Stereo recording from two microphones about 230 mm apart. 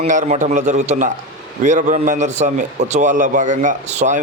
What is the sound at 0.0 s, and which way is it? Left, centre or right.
A man's voice, right.